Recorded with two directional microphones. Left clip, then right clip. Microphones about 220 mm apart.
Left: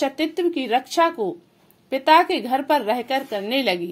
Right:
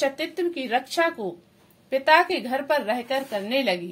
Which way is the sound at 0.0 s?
30° left (ahead or behind).